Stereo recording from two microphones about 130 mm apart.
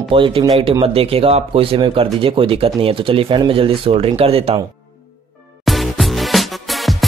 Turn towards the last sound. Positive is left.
turn(degrees=0)  # may be behind; listen again after turning